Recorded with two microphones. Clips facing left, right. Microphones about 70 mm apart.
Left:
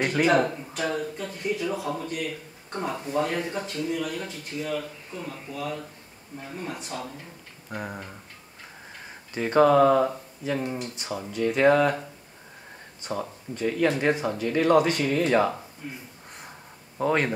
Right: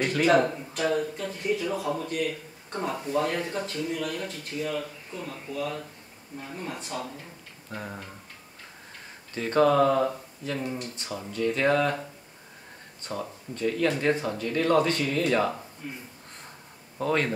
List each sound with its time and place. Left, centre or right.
0.0 s speech: left
0.3 s speech: centre
7.7 s speech: centre
9.3 s speech: centre
13.0 s speech: centre
17.0 s speech: centre